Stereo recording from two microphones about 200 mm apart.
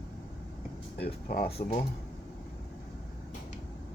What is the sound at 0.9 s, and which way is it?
Speech, 50° left (ahead or behind).